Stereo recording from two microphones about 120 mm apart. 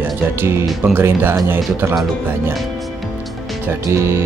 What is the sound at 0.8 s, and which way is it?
Speech, 20° right (ahead or behind).